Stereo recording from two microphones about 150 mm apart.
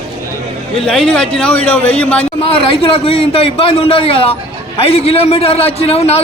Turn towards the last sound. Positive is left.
turn(degrees=45)  # may be behind; listen again after turning